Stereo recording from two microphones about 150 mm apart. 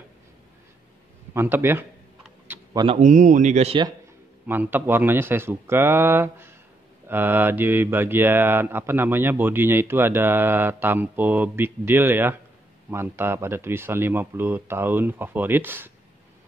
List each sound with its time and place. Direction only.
1.3 s speech: 15° right (ahead or behind)
2.4 s typing: 15° right (ahead or behind)
3.0 s speech: 55° right (ahead or behind)
4.5 s speech: 15° right (ahead or behind)